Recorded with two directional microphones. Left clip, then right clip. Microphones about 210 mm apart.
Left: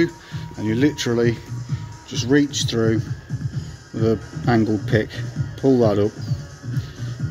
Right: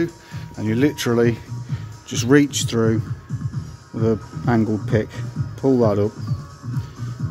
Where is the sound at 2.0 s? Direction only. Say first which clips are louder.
Right 3 dB; 30° right (ahead or behind).